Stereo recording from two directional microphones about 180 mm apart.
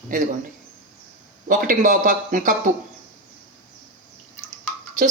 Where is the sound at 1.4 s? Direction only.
50° right (ahead or behind).